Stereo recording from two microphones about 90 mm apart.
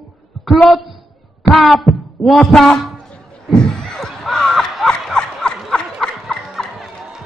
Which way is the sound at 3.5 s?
10° left (ahead or behind).